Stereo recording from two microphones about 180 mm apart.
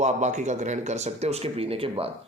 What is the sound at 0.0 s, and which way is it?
Speech, 40° right (ahead or behind).